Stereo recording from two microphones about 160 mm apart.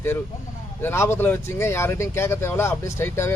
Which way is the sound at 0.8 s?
15° left (ahead or behind).